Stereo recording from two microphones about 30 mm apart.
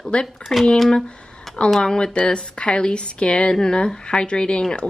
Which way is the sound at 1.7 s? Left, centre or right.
Left.